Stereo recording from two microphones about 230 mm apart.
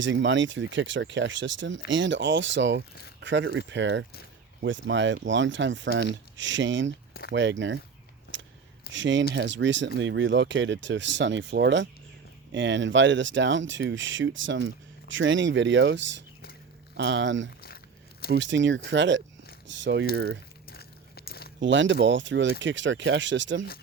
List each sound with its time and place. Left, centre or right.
0.0 s speech: right
8.3 s a sound: right
8.9 s speech: right
20.7 s biting: left
21.6 s speech: right